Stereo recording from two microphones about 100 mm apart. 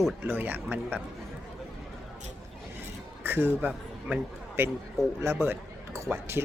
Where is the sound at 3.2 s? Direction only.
25° right (ahead or behind).